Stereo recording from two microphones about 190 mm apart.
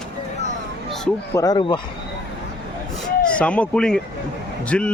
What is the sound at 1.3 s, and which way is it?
Speech, 20° left (ahead or behind).